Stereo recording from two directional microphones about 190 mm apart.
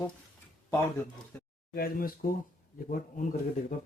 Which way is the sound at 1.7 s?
50° left (ahead or behind).